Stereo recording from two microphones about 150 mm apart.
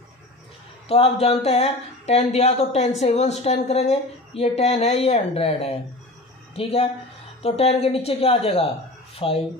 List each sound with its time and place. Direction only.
0.8 s a woman's voice: 40° left (ahead or behind)